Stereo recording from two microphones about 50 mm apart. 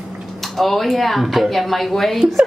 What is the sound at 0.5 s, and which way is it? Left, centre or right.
Speech, centre.